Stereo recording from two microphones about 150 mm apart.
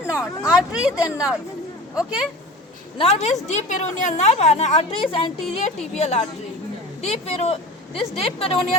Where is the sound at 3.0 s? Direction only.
45° left (ahead or behind).